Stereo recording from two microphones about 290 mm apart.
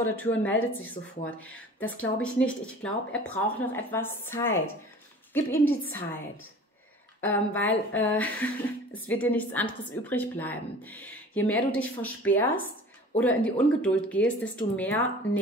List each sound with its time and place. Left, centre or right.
0.2 s a woman's voice: centre
1.0 s speech: centre
1.5 s a woman's voice: centre
7.2 s a woman's voice: centre